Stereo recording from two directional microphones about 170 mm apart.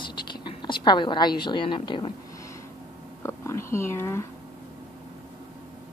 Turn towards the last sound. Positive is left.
turn(degrees=15)  # may be behind; listen again after turning